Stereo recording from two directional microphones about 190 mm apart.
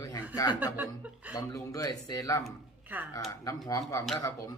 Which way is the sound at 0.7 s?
10° right (ahead or behind).